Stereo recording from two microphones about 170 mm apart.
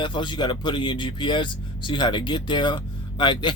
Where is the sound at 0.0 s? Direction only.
30° left (ahead or behind).